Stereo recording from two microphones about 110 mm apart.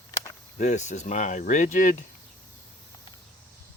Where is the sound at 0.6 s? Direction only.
90° left.